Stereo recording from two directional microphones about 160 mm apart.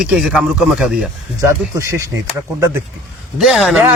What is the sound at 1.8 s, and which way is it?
Speech, 20° right (ahead or behind).